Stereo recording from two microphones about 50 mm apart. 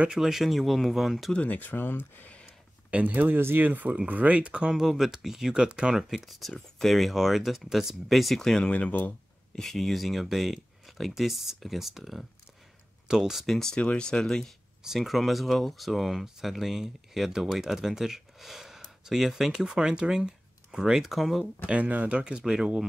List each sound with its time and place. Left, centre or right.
0.1 s speech: centre
1.4 s speech: left
2.9 s speech: right
3.3 s speech: right
3.6 s speech: right
4.7 s speech: centre
8.4 s speech: centre
8.6 s speech: left
9.6 s speech: centre
13.7 s speech: centre
15.0 s speech: centre
21.6 s speech: right
22.4 s speech: centre